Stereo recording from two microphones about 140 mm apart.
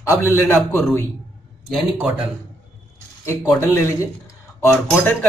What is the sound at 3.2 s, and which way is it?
A man's voice, 20° left (ahead or behind).